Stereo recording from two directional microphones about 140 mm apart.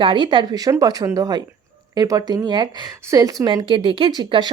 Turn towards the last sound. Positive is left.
turn(degrees=-30)  # may be behind; listen again after turning